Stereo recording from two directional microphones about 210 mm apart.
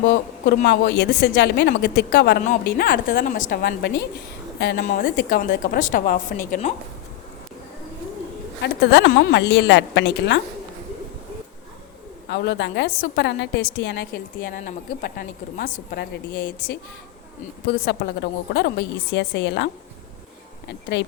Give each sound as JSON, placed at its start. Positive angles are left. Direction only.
{"t": 0.1, "sound": "a woman's voice", "side_deg": 50}
{"t": 8.6, "sound": "a woman's voice", "side_deg": 55}
{"t": 12.3, "sound": "a woman's voice", "side_deg": 55}